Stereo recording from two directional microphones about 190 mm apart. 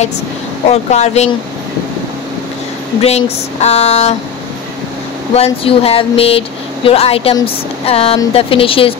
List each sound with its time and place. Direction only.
0.7 s speech: 35° left (ahead or behind)
3.0 s speech: 35° left (ahead or behind)
5.3 s speech: 30° left (ahead or behind)